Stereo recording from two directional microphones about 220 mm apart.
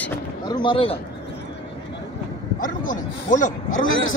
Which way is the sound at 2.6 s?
35° left (ahead or behind).